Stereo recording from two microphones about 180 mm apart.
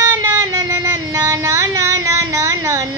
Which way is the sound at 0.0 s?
20° right (ahead or behind).